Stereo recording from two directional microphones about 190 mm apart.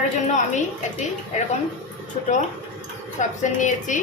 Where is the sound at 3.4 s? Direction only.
40° left (ahead or behind).